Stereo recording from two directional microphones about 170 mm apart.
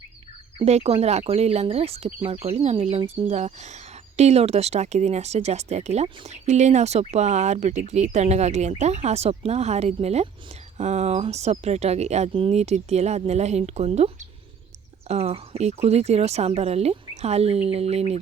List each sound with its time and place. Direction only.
0.6 s speech: 40° right (ahead or behind)